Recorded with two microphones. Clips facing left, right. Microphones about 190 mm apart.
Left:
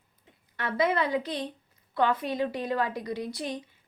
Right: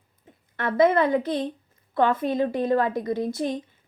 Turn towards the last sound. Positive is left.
turn(degrees=-50)  # may be behind; listen again after turning